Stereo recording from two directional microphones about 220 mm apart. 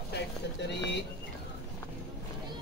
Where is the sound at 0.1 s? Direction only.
50° left (ahead or behind).